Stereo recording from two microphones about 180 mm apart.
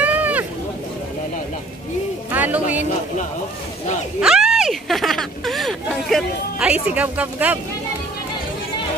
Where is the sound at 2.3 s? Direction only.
10° right (ahead or behind).